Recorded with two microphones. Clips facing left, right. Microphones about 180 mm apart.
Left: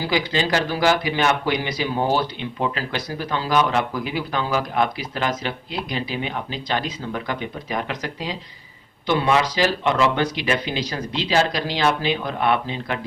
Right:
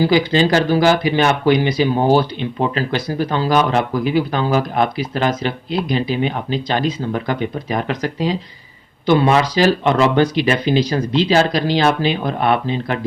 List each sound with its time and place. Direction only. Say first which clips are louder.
0.1 s speech: right 7 dB; 30° right (ahead or behind)
7.1 s speech: right 7 dB; 40° right (ahead or behind)